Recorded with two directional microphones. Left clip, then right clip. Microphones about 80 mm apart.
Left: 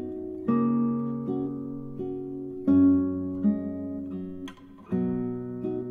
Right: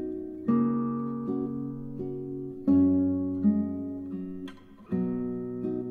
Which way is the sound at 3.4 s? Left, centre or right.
Centre.